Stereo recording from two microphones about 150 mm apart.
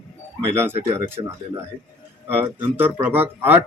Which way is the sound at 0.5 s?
15° right (ahead or behind).